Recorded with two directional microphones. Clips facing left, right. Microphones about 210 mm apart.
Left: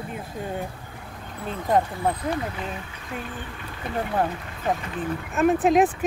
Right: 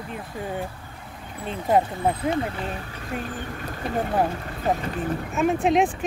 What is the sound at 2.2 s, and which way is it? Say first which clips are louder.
Speech: right 3 dB; 30° right (ahead or behind).